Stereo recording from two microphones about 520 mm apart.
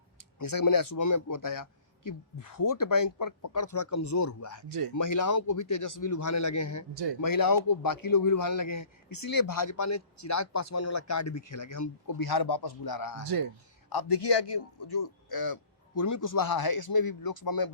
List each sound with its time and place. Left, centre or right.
0.3 s a man's voice: left
13.2 s speech: right
13.9 s a man's voice: left